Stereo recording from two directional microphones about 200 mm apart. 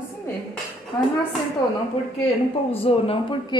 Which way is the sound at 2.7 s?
30° left (ahead or behind).